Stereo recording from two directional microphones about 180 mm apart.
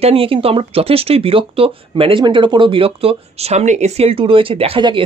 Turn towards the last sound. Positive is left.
turn(degrees=-30)  # may be behind; listen again after turning